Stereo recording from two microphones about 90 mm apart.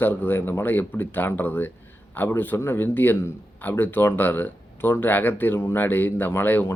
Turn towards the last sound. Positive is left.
turn(degrees=25)  # may be behind; listen again after turning